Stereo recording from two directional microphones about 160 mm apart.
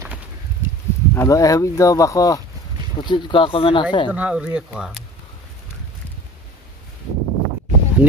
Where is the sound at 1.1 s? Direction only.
20° left (ahead or behind); by 3.8 s 35° left (ahead or behind).